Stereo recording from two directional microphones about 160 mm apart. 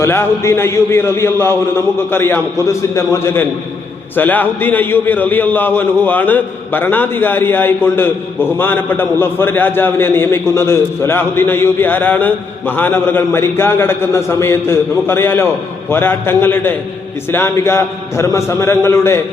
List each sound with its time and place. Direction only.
0.0 s a man's voice: 15° left (ahead or behind)